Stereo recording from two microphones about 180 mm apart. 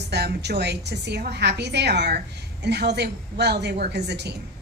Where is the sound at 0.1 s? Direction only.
65° right (ahead or behind).